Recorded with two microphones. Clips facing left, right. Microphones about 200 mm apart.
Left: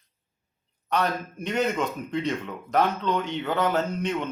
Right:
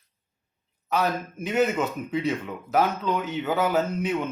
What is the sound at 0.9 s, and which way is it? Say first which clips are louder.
A man's voice: right 1 dB; 5° right (ahead or behind).